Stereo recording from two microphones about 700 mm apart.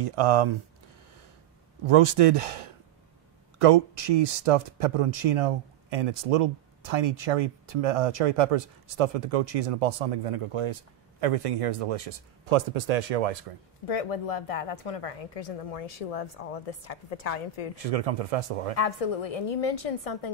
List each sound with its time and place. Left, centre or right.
0.0 s speech: right
1.9 s speech: right
3.6 s speech: right
13.8 s a woman's voice: left
17.8 s speech: right
18.8 s a woman's voice: left